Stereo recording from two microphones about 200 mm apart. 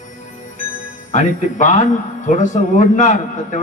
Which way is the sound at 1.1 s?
40° left (ahead or behind).